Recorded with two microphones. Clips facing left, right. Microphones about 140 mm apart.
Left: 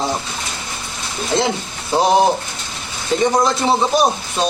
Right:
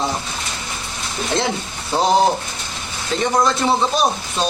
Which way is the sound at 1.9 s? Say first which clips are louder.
Left 2 dB; 10° left (ahead or behind).